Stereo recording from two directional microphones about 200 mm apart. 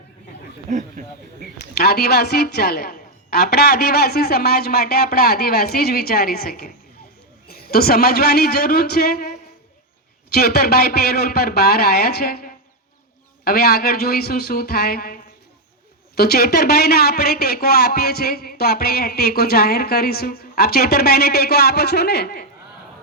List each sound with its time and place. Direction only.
0.7 s speech: 40° right (ahead or behind)
1.7 s speech: 50° left (ahead or behind)
10.3 s speech: 50° left (ahead or behind)